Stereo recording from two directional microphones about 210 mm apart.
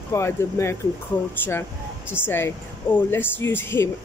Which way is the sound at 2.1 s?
10° left (ahead or behind).